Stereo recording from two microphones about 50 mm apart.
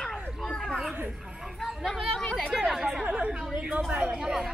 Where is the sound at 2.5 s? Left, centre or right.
Centre.